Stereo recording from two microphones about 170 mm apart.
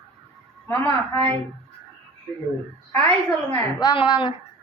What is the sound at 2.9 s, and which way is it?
Speech, 5° left (ahead or behind).